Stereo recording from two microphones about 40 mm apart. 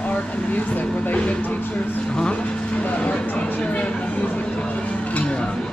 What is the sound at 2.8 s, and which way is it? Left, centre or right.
Speech, left.